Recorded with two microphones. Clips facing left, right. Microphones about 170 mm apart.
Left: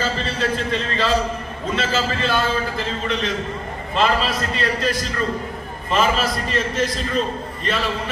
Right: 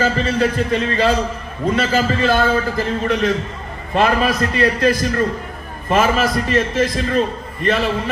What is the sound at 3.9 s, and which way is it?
A man's voice, 55° right (ahead or behind).